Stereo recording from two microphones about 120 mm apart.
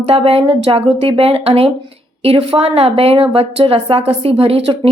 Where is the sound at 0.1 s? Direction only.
55° right (ahead or behind).